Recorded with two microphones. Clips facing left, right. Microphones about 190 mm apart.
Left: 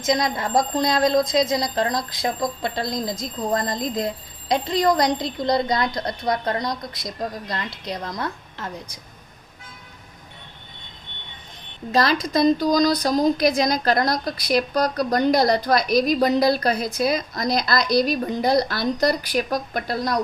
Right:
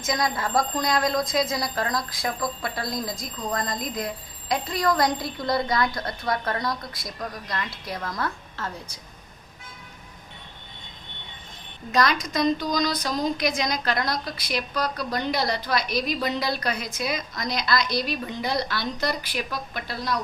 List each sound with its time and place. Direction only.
0.0 s a woman's voice: 20° left (ahead or behind)
11.9 s a woman's voice: 30° left (ahead or behind); by 20.1 s 45° left (ahead or behind)